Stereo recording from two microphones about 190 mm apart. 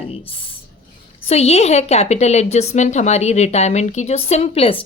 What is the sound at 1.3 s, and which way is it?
A woman's voice, 35° left (ahead or behind).